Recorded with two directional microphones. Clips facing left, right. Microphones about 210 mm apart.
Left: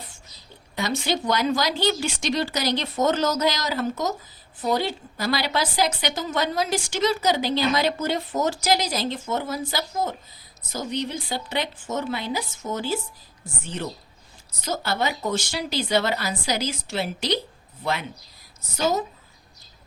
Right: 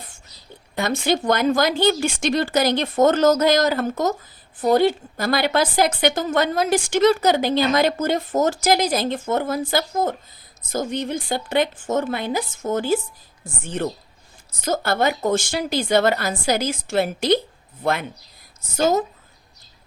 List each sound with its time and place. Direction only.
0.8 s a woman's voice: 55° right (ahead or behind)
18.8 s a woman's voice: 50° right (ahead or behind)